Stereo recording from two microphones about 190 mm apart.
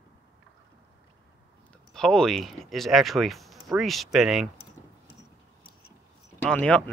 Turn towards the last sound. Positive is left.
turn(degrees=5)  # may be behind; listen again after turning